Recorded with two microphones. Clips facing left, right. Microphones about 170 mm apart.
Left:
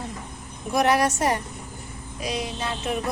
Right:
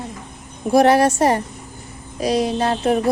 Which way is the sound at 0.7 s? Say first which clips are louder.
Right 7 dB; 30° right (ahead or behind).